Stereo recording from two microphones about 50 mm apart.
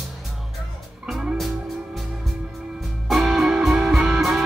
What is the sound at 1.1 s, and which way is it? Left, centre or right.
Music, centre.